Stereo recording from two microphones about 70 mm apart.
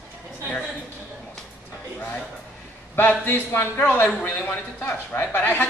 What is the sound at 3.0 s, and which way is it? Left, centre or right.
A man's voice, left.